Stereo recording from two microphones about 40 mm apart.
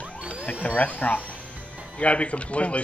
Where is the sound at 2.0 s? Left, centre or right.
Left.